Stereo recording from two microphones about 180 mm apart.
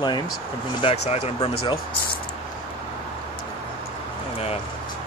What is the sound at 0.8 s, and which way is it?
Speech, 35° left (ahead or behind).